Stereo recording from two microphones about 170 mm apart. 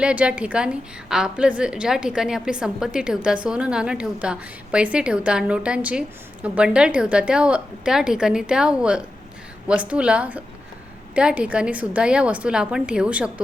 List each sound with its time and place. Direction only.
0.0 s a woman's voice: 5° right (ahead or behind)